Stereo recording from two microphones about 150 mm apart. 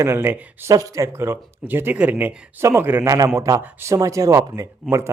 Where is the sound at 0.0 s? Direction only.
15° right (ahead or behind).